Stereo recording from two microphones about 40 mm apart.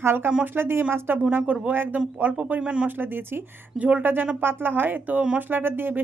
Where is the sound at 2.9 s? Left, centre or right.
Right.